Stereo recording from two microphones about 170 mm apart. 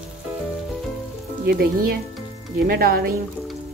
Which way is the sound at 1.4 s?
65° right (ahead or behind).